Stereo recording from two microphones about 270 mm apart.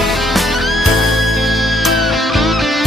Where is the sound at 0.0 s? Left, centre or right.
Centre.